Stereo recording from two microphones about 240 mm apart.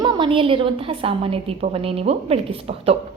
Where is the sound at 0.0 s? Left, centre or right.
Right.